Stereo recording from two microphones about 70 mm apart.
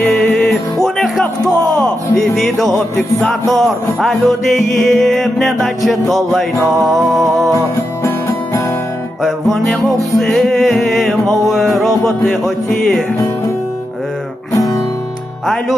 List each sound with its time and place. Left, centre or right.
0.9 s music: centre
7.5 s music: left
9.2 s music: centre